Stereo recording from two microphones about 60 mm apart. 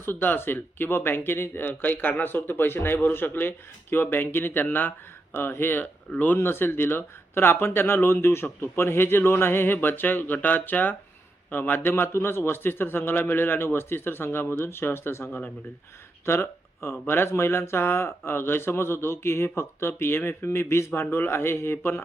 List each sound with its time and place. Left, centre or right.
0.0 s speech: left
6.4 s speech: left
16.2 s speech: left